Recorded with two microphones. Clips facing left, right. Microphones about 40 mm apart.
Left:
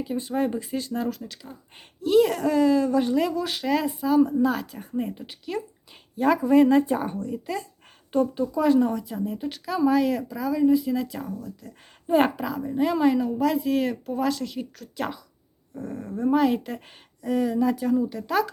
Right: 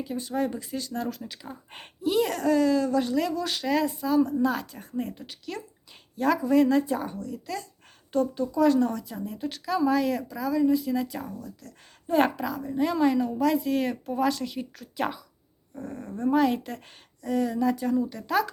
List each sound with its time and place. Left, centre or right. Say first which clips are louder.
0.2 s speech: left 2 dB; left
1.0 s a woman's voice: left 3 dB; centre
11.6 s a woman's voice: left 3 dB; centre